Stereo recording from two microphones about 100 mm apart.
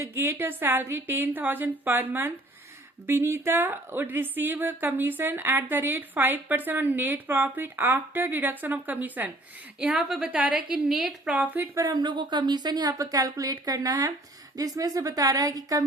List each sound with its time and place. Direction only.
0.0 s a woman's voice: 25° right (ahead or behind); by 11.4 s 5° right (ahead or behind)
11.5 s a woman's voice: 20° right (ahead or behind)
11.8 s a woman's voice: 45° right (ahead or behind)